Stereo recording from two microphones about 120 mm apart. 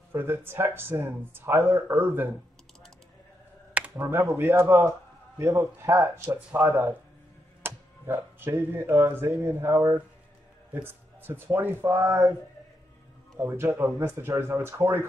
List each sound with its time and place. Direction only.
0.1 s speech: 20° right (ahead or behind)
3.7 s speech: 15° right (ahead or behind)
13.4 s speech: 20° right (ahead or behind)